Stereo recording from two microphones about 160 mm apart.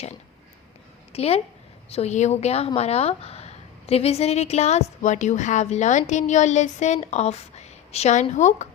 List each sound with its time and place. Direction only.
1.1 s a woman's voice: 40° left (ahead or behind)